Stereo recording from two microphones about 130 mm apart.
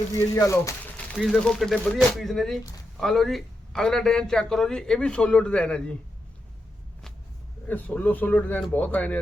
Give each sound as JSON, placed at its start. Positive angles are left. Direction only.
{"t": 0.3, "sound": "speech", "side_deg": 25}
{"t": 0.9, "sound": "a man's voice", "side_deg": 0}
{"t": 7.7, "sound": "speech", "side_deg": 10}